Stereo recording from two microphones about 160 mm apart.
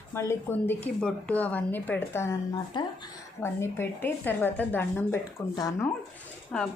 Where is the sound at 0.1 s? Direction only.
15° left (ahead or behind).